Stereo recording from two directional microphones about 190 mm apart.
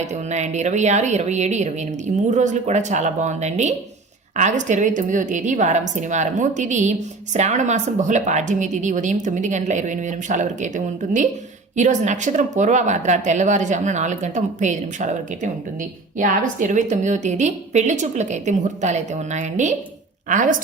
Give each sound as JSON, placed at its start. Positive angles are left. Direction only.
{"t": 0.0, "sound": "a woman's voice", "side_deg": -35}
{"t": 16.1, "sound": "a woman's voice", "side_deg": -40}